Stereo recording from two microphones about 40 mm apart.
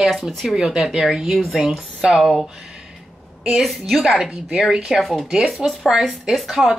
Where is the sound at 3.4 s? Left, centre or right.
Centre.